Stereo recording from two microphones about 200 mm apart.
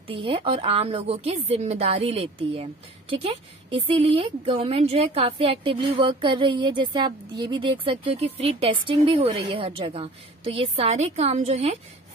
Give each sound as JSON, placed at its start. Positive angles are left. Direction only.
{"t": 0.0, "sound": "speech", "side_deg": -25}